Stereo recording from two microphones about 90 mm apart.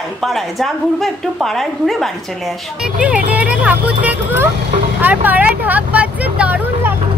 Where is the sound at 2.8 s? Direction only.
10° right (ahead or behind).